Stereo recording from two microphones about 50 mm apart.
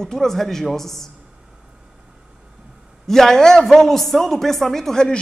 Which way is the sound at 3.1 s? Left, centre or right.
Centre.